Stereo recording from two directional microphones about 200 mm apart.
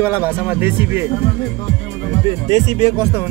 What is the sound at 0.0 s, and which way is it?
Speech, 10° right (ahead or behind).